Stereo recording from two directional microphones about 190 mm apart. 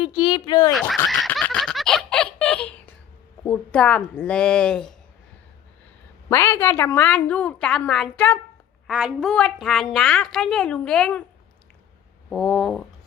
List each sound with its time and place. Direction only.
0.0 s speech: 25° left (ahead or behind)
0.7 s snicker: centre (ahead or behind)
3.4 s a woman's voice: 10° left (ahead or behind)
6.3 s a woman's voice: 15° left (ahead or behind)
8.9 s a woman's voice: centre (ahead or behind)
12.3 s a woman's voice: 5° left (ahead or behind)